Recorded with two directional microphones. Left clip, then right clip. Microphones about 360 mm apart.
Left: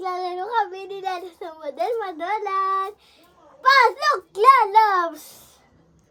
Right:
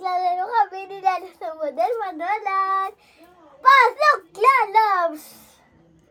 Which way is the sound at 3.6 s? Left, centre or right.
Centre.